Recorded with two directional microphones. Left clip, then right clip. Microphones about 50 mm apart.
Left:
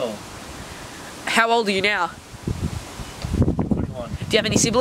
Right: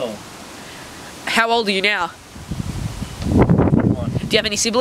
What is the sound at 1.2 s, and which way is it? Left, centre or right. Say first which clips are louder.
Speech: right 1 dB; centre.